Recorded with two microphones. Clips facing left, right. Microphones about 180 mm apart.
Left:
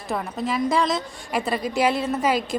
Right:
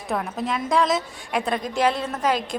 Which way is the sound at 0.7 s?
Centre (ahead or behind).